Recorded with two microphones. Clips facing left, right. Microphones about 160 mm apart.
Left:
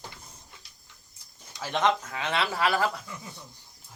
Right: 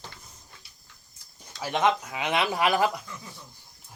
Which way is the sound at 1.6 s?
15° right (ahead or behind).